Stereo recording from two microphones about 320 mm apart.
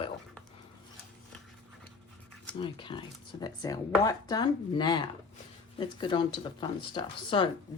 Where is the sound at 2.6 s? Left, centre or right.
Centre.